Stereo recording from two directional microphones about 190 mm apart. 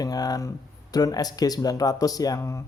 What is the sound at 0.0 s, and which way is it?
Speech, 20° left (ahead or behind).